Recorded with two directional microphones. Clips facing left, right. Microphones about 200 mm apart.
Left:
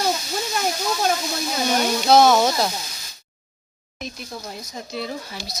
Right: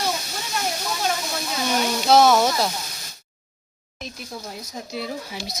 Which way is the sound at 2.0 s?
5° right (ahead or behind).